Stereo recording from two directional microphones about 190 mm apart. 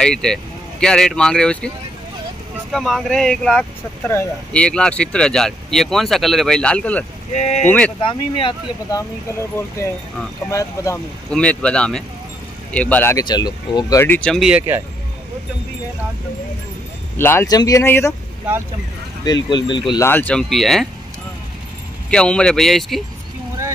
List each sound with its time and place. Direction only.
0.0 s speech: 5° left (ahead or behind)
2.7 s speech: centre (ahead or behind)
7.3 s speech: 35° left (ahead or behind)
10.5 s speech: 15° left (ahead or behind)
11.2 s speech: 5° left (ahead or behind)
17.2 s speech: 10° left (ahead or behind)
19.2 s speech: 20° left (ahead or behind); by 20.9 s centre (ahead or behind)
22.1 s speech: 5° left (ahead or behind)